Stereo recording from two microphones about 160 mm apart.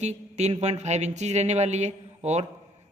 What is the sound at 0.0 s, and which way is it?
A woman's voice, 45° right (ahead or behind).